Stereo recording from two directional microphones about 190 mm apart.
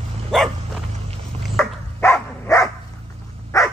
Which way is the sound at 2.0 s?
15° left (ahead or behind).